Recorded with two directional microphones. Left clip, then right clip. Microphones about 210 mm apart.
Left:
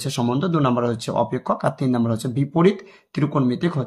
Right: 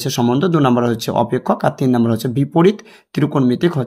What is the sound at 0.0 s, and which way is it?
Speech, 25° right (ahead or behind).